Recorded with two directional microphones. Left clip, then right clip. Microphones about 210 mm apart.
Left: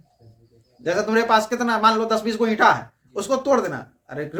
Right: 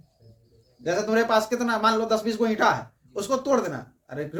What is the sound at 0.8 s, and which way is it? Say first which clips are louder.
Speech: left 3 dB; 25° left (ahead or behind).